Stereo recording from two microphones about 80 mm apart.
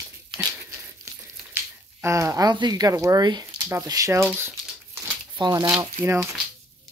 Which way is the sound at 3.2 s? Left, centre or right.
Right.